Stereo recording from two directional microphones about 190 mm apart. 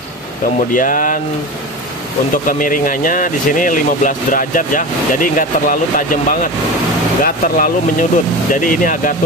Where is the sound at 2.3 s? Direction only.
45° left (ahead or behind).